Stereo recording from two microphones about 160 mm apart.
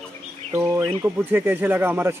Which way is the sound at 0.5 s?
15° right (ahead or behind).